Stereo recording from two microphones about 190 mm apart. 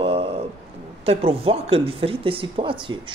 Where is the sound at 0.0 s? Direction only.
30° right (ahead or behind).